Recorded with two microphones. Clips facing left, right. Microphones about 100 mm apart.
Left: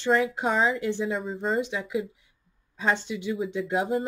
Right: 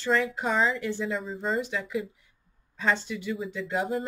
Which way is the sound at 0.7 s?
20° left (ahead or behind).